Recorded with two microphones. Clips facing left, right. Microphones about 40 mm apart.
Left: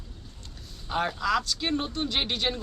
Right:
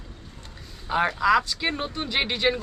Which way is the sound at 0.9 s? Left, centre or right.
Centre.